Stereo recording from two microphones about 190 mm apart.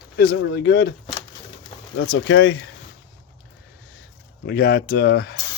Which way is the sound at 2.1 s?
75° left (ahead or behind).